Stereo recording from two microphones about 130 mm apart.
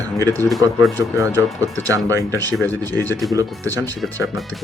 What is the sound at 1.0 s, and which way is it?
Speech, 25° right (ahead or behind).